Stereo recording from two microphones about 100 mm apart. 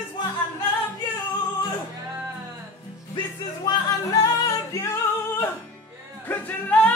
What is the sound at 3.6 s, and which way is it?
Music, 40° left (ahead or behind).